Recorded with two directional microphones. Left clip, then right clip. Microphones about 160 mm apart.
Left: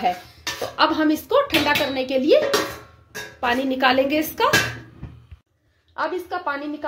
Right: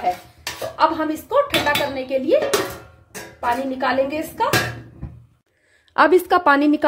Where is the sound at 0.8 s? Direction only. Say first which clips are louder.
Even; 70° left (ahead or behind).